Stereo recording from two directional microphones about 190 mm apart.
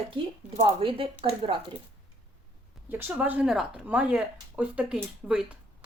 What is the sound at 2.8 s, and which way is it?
Speech, 10° right (ahead or behind).